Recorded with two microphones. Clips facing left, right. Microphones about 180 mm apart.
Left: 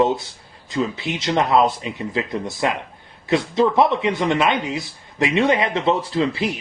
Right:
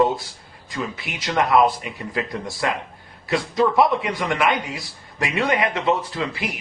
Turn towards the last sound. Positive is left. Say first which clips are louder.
# left 6 dB
turn(degrees=30)  # may be behind; listen again after turning